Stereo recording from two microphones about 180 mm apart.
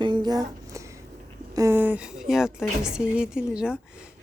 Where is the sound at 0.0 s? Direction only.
25° right (ahead or behind).